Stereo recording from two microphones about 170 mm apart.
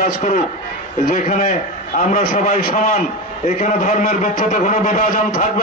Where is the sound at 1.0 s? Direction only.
50° left (ahead or behind).